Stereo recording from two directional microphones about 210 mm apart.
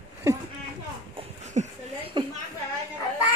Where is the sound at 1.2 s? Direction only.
30° right (ahead or behind).